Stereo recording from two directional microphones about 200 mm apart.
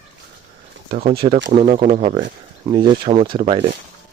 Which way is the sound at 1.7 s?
30° right (ahead or behind).